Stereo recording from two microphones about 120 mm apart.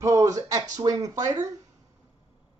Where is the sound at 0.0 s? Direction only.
25° right (ahead or behind).